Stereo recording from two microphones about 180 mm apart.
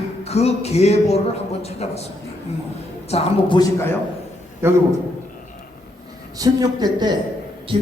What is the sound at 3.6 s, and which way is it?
Speech, 15° left (ahead or behind).